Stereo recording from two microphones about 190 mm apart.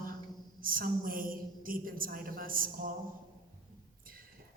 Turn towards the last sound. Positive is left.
turn(degrees=-50)  # may be behind; listen again after turning